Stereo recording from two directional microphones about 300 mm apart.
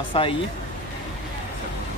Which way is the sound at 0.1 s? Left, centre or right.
Centre.